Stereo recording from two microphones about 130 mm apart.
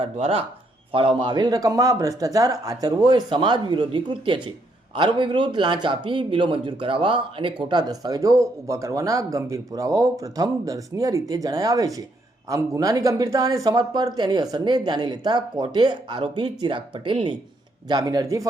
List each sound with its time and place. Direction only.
0.0 s speech: 50° right (ahead or behind); by 18.4 s 25° right (ahead or behind)